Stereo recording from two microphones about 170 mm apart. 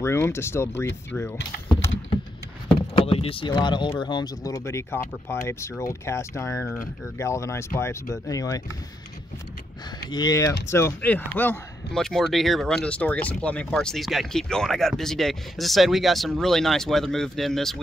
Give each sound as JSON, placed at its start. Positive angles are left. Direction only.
{"t": 0.0, "sound": "speech", "side_deg": 15}
{"t": 2.7, "sound": "speech", "side_deg": 35}
{"t": 10.0, "sound": "speech", "side_deg": 25}